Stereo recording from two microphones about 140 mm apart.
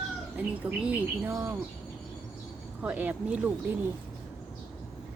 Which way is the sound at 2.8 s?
10° right (ahead or behind).